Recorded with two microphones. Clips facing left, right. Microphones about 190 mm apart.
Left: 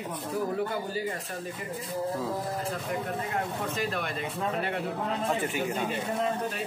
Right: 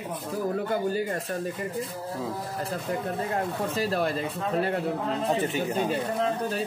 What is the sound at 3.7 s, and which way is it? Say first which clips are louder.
Speech: right 5 dB; 35° right (ahead or behind).